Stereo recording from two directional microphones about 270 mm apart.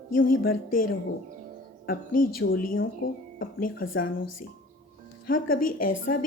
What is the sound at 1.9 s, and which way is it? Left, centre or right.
Speech, left.